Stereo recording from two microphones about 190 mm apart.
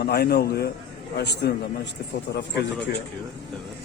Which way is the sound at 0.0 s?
60° left (ahead or behind).